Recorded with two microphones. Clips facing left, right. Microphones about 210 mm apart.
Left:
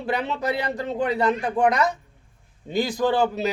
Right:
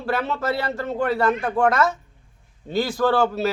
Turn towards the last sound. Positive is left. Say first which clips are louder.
# right 2 dB
turn(degrees=15)  # may be behind; listen again after turning